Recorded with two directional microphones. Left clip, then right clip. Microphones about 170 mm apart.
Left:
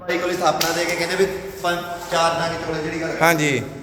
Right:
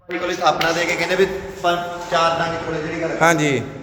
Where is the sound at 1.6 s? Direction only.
10° right (ahead or behind).